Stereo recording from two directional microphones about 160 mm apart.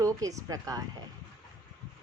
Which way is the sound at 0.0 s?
20° right (ahead or behind).